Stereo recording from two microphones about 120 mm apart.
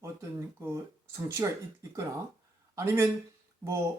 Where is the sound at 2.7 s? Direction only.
20° right (ahead or behind).